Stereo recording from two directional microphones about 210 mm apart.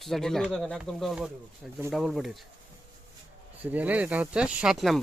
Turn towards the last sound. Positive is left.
turn(degrees=0)  # may be behind; listen again after turning